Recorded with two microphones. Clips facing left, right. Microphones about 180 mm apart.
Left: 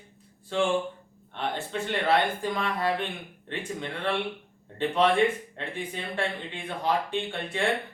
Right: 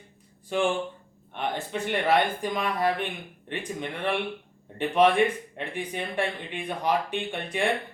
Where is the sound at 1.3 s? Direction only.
15° right (ahead or behind).